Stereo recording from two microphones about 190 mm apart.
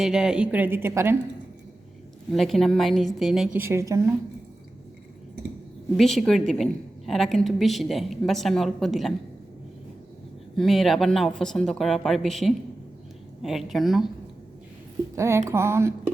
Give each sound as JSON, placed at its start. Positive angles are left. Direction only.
{"t": 0.0, "sound": "a woman's voice", "side_deg": -5}
{"t": 2.3, "sound": "a woman's voice", "side_deg": 0}
{"t": 3.6, "sound": "a woman's voice", "side_deg": -15}
{"t": 6.0, "sound": "a woman's voice", "side_deg": 0}
{"t": 10.6, "sound": "a woman's voice", "side_deg": 0}
{"t": 15.1, "sound": "a woman's voice", "side_deg": -15}